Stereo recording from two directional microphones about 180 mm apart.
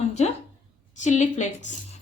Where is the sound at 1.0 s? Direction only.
40° left (ahead or behind).